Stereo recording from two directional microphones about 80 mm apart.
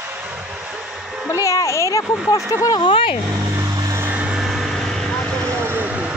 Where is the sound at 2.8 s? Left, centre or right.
Left.